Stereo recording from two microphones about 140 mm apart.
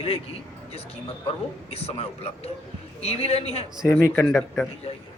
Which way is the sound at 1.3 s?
45° left (ahead or behind).